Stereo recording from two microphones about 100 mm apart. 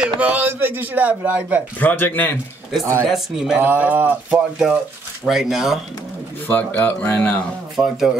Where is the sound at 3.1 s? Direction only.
Centre (ahead or behind).